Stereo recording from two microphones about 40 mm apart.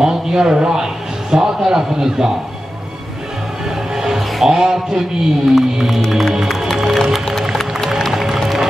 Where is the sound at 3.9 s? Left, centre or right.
Centre.